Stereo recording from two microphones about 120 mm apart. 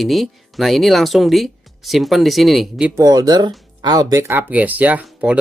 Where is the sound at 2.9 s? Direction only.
30° right (ahead or behind).